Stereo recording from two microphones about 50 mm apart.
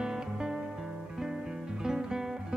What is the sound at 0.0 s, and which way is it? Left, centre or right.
Music, centre.